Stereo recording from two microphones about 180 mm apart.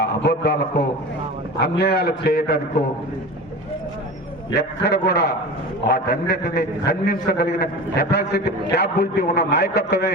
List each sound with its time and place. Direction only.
0.0 s a man's voice: 65° left (ahead or behind)
4.5 s a man's voice: 65° left (ahead or behind)